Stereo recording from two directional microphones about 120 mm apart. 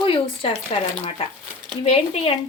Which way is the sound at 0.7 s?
50° left (ahead or behind).